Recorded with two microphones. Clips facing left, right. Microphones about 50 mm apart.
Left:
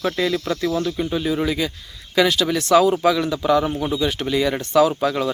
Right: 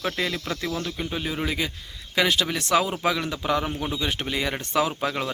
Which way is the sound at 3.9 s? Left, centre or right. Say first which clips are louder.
Left 7 dB; centre.